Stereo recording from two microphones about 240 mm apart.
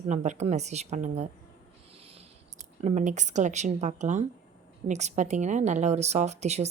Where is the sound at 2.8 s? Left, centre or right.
Right.